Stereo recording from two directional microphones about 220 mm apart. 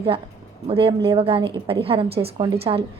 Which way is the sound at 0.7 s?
25° right (ahead or behind).